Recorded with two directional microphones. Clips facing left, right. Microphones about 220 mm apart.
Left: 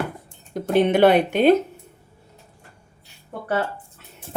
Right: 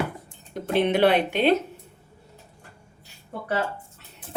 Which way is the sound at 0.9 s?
45° left (ahead or behind).